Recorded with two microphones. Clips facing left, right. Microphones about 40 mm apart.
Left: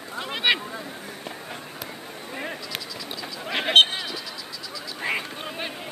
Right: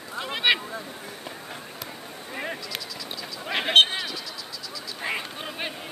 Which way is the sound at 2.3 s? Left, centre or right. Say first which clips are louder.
Right 1 dB; centre.